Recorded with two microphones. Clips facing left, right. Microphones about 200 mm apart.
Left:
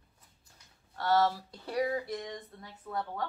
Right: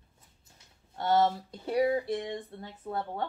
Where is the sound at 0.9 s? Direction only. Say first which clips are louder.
Right 2 dB; 20° right (ahead or behind).